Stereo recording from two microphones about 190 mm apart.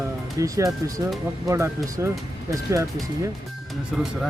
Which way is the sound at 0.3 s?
15° right (ahead or behind).